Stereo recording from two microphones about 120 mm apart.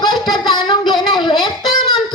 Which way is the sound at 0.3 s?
35° left (ahead or behind).